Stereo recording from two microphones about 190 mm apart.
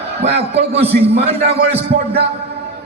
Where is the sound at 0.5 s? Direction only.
30° right (ahead or behind).